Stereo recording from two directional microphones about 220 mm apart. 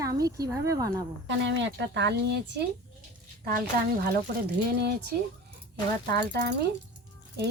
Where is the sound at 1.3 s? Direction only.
55° right (ahead or behind).